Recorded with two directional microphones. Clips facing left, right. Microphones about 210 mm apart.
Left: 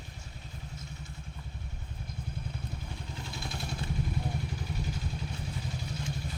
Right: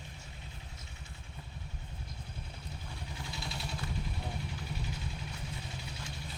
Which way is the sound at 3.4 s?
50° left (ahead or behind).